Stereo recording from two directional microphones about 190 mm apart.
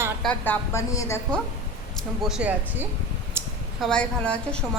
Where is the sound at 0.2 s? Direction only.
5° left (ahead or behind).